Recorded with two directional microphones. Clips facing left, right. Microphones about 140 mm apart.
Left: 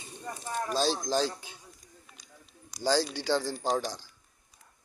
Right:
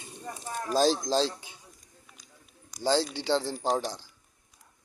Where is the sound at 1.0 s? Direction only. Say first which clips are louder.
Right 2 dB; 25° right (ahead or behind).